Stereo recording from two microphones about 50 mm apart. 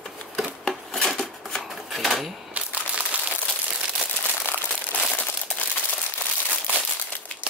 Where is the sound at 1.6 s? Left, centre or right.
Centre.